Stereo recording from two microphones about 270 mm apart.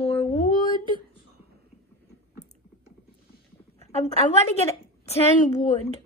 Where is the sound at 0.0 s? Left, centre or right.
Left.